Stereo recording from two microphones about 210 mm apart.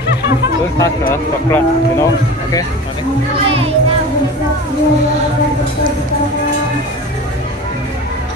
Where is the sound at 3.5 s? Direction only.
25° right (ahead or behind).